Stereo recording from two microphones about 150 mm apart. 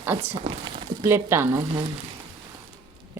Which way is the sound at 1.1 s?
15° right (ahead or behind).